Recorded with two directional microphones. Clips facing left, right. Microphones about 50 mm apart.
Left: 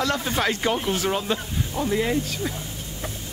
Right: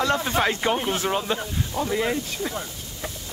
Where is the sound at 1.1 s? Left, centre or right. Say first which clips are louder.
Even; centre.